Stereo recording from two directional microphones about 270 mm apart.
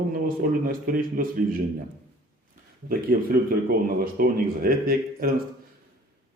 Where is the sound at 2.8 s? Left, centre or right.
Right.